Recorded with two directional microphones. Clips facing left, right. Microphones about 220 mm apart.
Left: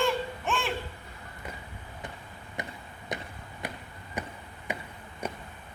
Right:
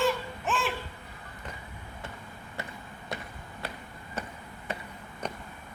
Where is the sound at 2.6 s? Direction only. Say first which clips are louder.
Left 2 dB; 15° left (ahead or behind).